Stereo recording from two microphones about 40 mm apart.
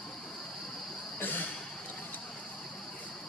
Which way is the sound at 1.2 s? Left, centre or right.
Left.